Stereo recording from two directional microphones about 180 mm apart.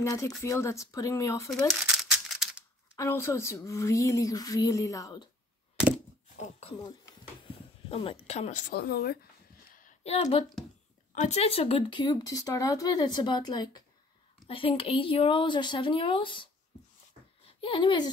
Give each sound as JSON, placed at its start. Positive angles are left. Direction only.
{"t": 0.0, "sound": "speech", "side_deg": 15}
{"t": 1.7, "sound": "crumpling", "side_deg": 0}
{"t": 3.0, "sound": "speech", "side_deg": 15}
{"t": 6.3, "sound": "speech", "side_deg": 40}
{"t": 7.9, "sound": "speech", "side_deg": 30}
{"t": 8.7, "sound": "speech", "side_deg": 60}
{"t": 10.0, "sound": "speech", "side_deg": 35}
{"t": 17.5, "sound": "speech", "side_deg": 30}